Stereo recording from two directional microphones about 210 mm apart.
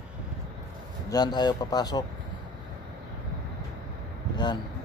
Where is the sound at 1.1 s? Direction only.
20° left (ahead or behind).